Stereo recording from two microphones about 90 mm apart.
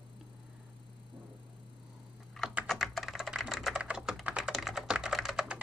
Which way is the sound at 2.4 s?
Centre (ahead or behind).